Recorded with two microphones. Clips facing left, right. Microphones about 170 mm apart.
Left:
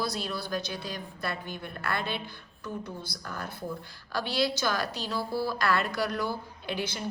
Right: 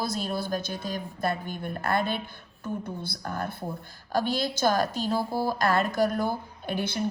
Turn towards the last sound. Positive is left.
turn(degrees=-55)  # may be behind; listen again after turning